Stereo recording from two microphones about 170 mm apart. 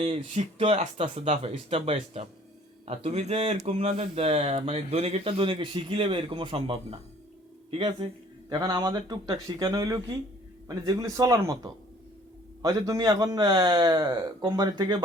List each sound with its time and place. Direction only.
0.0 s speech: 40° right (ahead or behind); by 14.9 s 25° right (ahead or behind)